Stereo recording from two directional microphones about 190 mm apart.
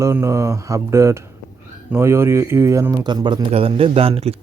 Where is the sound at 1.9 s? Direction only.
15° right (ahead or behind).